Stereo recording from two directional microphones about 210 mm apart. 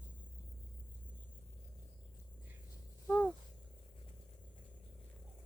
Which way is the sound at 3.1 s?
5° left (ahead or behind).